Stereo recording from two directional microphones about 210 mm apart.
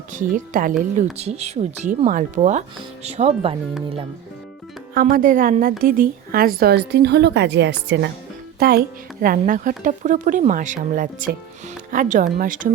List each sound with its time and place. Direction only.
0.1 s speech: 40° right (ahead or behind)
4.9 s speech: 45° right (ahead or behind)